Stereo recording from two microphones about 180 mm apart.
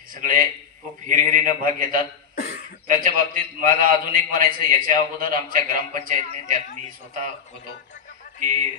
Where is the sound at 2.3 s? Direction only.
45° left (ahead or behind).